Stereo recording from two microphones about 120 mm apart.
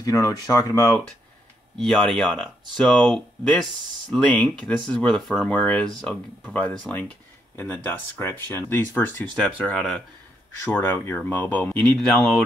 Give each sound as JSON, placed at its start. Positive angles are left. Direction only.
{"t": 0.0, "sound": "speech", "side_deg": 25}
{"t": 1.8, "sound": "speech", "side_deg": 5}
{"t": 10.6, "sound": "speech", "side_deg": 20}